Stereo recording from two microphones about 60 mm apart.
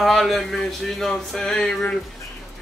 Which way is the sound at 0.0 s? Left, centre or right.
Centre.